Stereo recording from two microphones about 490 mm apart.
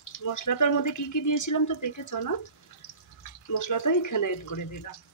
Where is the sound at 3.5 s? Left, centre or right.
Left.